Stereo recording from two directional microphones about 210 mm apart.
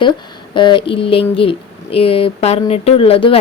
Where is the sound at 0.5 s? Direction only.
25° left (ahead or behind).